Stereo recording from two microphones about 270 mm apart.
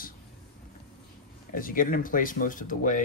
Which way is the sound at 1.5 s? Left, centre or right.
Left.